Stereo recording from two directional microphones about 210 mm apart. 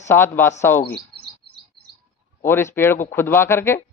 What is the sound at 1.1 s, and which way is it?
Chirp, 50° right (ahead or behind).